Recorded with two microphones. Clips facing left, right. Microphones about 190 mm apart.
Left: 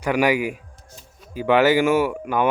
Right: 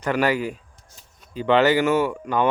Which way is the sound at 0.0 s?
10° left (ahead or behind).